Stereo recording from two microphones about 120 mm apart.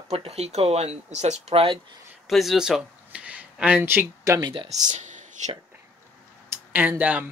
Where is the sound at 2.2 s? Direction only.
Centre (ahead or behind); by 4.3 s 15° right (ahead or behind).